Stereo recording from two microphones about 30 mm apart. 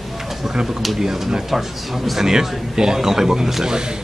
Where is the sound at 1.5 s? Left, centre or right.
Centre.